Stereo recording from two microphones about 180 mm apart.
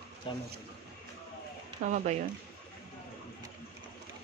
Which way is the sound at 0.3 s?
30° left (ahead or behind).